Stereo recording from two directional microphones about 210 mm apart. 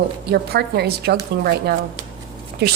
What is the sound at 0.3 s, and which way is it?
A woman's voice, 50° right (ahead or behind).